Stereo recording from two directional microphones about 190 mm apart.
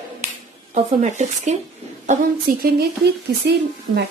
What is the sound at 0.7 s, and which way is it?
Speech, 40° right (ahead or behind).